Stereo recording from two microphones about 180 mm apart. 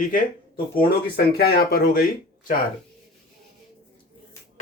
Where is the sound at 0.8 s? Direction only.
60° left (ahead or behind).